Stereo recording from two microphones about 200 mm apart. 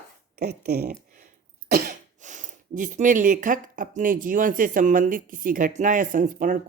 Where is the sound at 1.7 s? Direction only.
40° right (ahead or behind).